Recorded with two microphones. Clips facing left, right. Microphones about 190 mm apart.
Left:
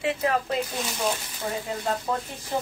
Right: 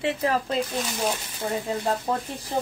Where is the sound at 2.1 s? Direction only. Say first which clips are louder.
Even; 35° right (ahead or behind).